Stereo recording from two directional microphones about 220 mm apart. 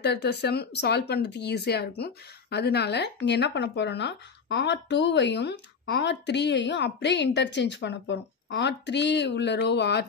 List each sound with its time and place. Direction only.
0.0 s speech: 50° left (ahead or behind)